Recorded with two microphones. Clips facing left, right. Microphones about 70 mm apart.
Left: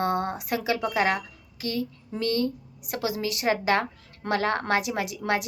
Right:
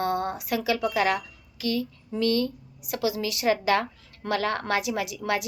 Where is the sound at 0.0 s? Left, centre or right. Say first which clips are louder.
Left 1 dB; left.